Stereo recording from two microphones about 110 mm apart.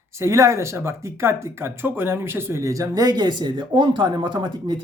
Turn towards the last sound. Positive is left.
turn(degrees=-45)  # may be behind; listen again after turning